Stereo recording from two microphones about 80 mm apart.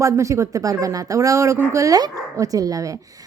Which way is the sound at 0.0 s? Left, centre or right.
Right.